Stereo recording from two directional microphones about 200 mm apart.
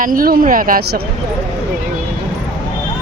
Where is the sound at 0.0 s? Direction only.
45° right (ahead or behind).